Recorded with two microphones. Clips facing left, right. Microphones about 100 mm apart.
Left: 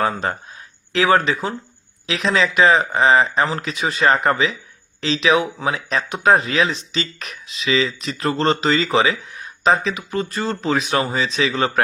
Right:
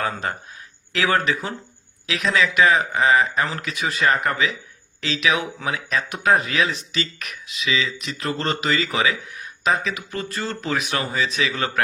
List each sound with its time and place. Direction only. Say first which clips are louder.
0.0 s speech: left 5 dB; 30° left (ahead or behind)